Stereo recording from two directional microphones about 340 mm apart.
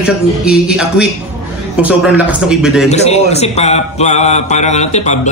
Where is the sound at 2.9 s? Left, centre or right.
Centre.